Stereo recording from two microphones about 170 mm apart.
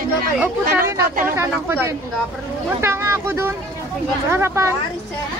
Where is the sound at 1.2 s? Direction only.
15° right (ahead or behind).